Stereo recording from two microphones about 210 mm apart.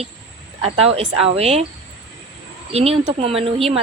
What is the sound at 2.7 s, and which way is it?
Speech, 30° right (ahead or behind).